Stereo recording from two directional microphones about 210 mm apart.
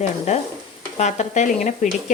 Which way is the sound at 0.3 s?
35° left (ahead or behind).